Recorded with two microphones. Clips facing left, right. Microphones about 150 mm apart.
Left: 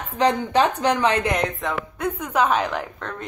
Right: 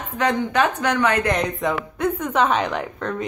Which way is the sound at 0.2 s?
30° left (ahead or behind).